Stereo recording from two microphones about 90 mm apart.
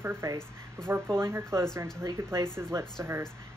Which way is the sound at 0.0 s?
25° right (ahead or behind).